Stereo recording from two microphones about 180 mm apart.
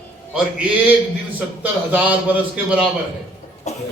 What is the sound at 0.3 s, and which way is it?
A man's voice, 5° right (ahead or behind).